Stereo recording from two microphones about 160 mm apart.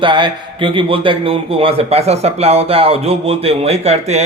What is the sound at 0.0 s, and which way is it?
A man's voice, 30° right (ahead or behind).